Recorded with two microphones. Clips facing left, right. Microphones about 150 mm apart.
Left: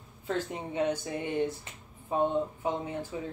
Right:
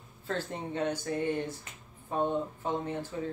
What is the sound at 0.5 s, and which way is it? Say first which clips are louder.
Speech: left 2 dB; 10° left (ahead or behind).